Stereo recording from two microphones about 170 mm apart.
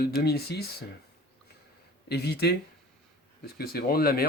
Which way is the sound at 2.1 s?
70° left (ahead or behind).